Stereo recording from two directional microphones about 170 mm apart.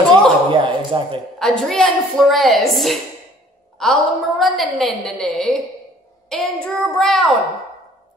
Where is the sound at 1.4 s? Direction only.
Centre (ahead or behind).